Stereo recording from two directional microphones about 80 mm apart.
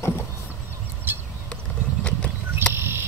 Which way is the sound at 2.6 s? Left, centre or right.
Right.